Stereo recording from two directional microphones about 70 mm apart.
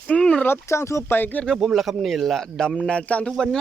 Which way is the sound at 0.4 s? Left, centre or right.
Left.